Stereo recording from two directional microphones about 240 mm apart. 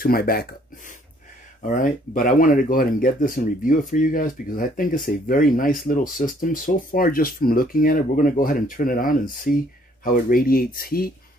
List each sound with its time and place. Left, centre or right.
0.0 s speech: left